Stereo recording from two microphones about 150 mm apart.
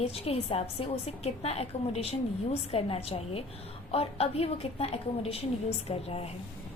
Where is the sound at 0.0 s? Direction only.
40° left (ahead or behind).